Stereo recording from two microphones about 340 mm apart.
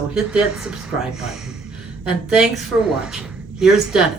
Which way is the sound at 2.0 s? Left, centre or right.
Centre.